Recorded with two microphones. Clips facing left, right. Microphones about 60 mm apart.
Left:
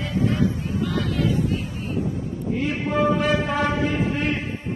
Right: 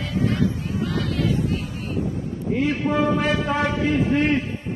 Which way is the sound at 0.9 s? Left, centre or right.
Centre.